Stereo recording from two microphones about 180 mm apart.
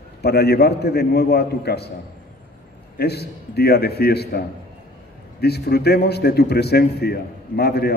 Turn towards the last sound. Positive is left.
turn(degrees=60)  # may be behind; listen again after turning